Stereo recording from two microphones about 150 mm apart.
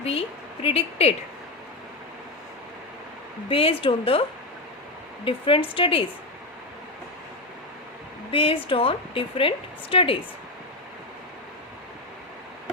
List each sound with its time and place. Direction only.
0.0 s a woman's voice: 40° left (ahead or behind)
3.5 s a woman's voice: 40° left (ahead or behind)
5.2 s a woman's voice: 35° left (ahead or behind)
8.3 s a woman's voice: 35° left (ahead or behind)